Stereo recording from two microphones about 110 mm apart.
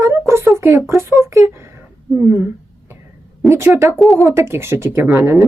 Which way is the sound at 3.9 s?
Centre (ahead or behind).